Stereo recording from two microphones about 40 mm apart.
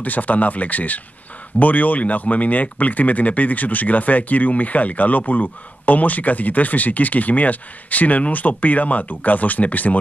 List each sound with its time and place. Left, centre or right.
0.0 s speech: left